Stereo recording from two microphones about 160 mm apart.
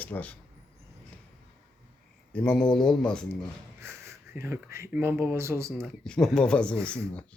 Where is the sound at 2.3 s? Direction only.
5° left (ahead or behind).